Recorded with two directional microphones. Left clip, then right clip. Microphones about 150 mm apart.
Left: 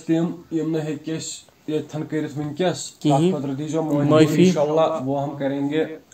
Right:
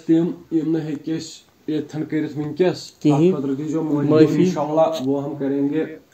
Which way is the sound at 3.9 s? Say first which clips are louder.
Right 1 dB; 60° left (ahead or behind).